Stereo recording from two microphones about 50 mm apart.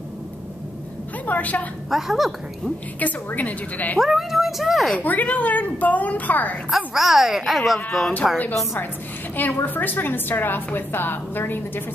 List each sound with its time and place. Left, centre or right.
1.2 s a sound: left
1.9 s a child's voice: centre
3.0 s a woman's voice: left
4.0 s a child's voice: centre
4.9 s a woman's voice: left
6.7 s a child's voice: centre
9.4 s a woman's voice: left